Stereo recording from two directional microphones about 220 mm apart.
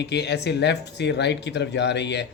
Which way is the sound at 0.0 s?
50° left (ahead or behind).